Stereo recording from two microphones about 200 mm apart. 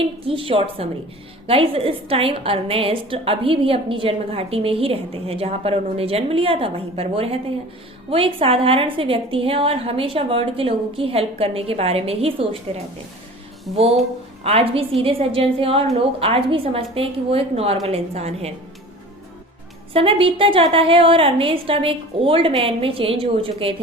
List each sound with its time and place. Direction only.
0.0 s a woman's voice: 25° right (ahead or behind)
14.4 s a woman's voice: 30° right (ahead or behind)
19.9 s a woman's voice: 25° right (ahead or behind)